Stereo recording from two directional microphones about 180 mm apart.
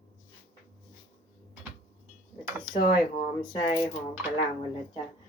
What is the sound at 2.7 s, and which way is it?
Speech, 50° left (ahead or behind).